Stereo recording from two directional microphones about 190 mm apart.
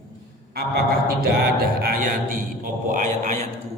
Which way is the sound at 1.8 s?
50° right (ahead or behind).